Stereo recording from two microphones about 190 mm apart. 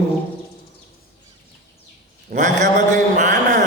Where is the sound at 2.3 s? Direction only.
40° right (ahead or behind).